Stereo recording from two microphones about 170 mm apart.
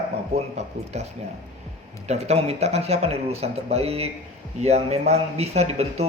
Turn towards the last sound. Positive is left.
turn(degrees=-40)  # may be behind; listen again after turning